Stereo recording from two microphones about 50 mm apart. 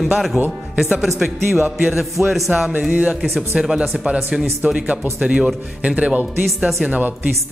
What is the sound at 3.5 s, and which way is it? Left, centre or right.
Speech, centre.